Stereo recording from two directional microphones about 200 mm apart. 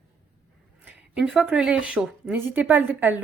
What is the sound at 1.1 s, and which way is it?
A woman's voice, 5° right (ahead or behind).